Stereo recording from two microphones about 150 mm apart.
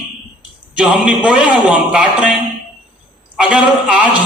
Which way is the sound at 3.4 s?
5° right (ahead or behind).